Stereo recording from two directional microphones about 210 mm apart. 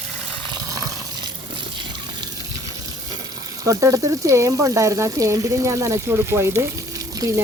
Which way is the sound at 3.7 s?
15° right (ahead or behind).